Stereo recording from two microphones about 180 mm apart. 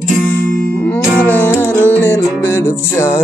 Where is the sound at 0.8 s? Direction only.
10° left (ahead or behind).